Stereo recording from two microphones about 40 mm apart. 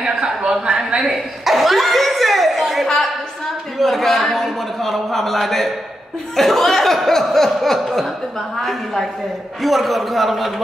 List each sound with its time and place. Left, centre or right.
0.0 s a sound: centre
0.5 s speech: right
1.1 s chuckle: centre
3.7 s a man's voice: centre